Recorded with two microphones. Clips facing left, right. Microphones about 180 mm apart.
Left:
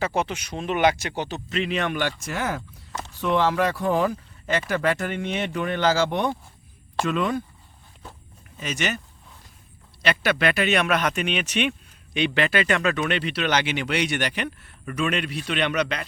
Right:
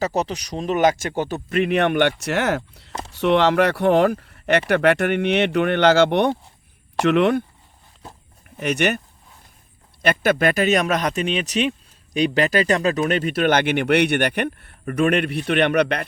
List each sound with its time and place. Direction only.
0.0 s speech: 40° right (ahead or behind); by 7.4 s 65° right (ahead or behind)
8.5 s speech: 60° right (ahead or behind)
10.0 s speech: 50° right (ahead or behind)